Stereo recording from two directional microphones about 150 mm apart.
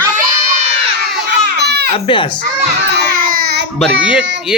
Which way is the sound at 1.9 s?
35° left (ahead or behind).